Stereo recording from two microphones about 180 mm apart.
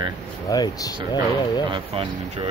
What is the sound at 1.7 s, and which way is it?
Speech, 30° right (ahead or behind).